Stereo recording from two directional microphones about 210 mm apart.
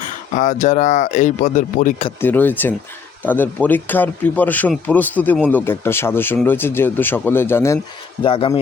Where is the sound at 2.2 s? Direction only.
10° left (ahead or behind).